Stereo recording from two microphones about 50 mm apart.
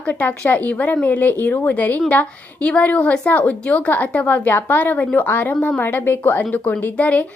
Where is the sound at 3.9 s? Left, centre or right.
Left.